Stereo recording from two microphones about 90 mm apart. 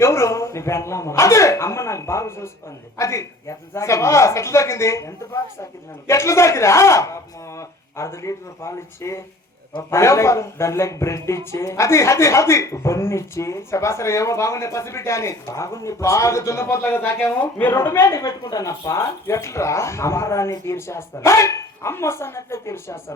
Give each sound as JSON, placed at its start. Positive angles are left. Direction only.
{"t": 0.0, "sound": "speech", "side_deg": 30}
{"t": 18.0, "sound": "speech", "side_deg": 40}